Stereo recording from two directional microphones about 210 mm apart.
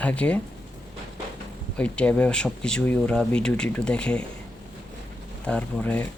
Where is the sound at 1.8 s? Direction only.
5° left (ahead or behind).